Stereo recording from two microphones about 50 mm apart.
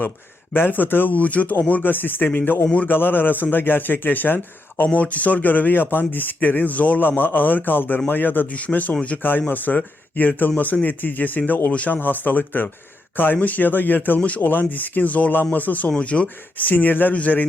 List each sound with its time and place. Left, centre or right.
0.5 s speech: left